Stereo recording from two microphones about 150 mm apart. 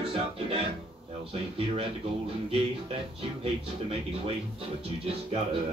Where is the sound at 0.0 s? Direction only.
40° right (ahead or behind).